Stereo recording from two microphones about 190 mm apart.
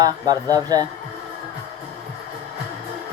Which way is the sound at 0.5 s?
20° right (ahead or behind).